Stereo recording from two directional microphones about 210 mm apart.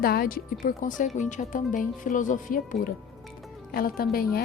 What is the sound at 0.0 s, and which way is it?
A woman's voice, 45° left (ahead or behind).